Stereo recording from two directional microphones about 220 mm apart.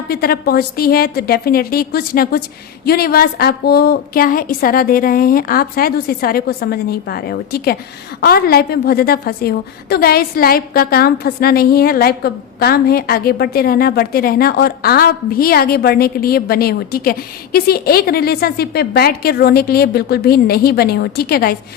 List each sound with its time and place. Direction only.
0.1 s a woman's voice: 45° left (ahead or behind)